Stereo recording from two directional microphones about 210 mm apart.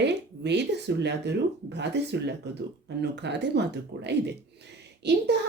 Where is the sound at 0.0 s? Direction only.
55° right (ahead or behind).